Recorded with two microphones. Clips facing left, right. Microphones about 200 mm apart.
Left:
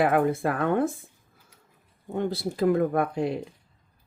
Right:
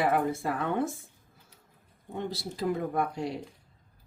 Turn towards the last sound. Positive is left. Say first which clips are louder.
# left 5 dB
turn(degrees=55)  # may be behind; listen again after turning